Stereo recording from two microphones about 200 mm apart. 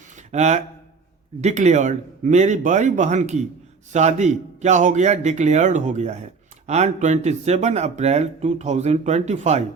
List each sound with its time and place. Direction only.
0.3 s speech: 35° right (ahead or behind)